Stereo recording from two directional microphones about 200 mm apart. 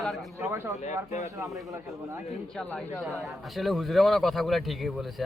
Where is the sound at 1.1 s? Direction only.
35° left (ahead or behind).